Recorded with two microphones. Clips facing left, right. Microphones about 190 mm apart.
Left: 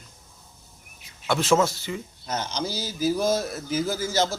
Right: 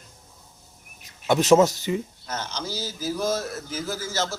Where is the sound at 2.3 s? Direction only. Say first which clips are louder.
Left 5 dB; 15° left (ahead or behind).